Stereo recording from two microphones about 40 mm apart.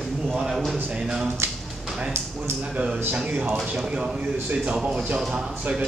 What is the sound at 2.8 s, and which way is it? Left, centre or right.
Speech, right.